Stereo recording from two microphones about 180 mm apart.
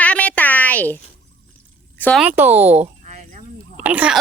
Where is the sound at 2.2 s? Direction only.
10° right (ahead or behind).